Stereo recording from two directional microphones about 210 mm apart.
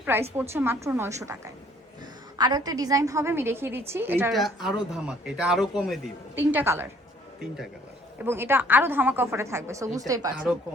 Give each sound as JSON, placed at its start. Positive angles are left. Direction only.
{"t": 0.0, "sound": "a woman's voice", "side_deg": -10}
{"t": 2.4, "sound": "a woman's voice", "side_deg": -20}
{"t": 8.2, "sound": "a woman's voice", "side_deg": -10}